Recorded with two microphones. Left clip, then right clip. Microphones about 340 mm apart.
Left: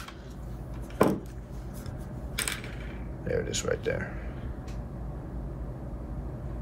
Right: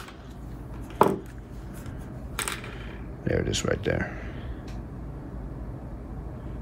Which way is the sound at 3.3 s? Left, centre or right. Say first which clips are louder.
Right 3 dB; right.